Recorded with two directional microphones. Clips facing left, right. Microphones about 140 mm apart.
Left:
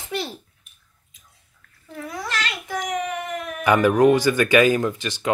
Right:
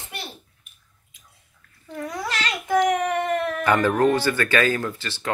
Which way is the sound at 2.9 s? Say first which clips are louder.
Right 4 dB; 60° right (ahead or behind).